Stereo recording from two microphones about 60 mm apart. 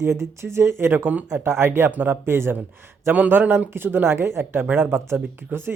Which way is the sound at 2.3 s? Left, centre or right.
Right.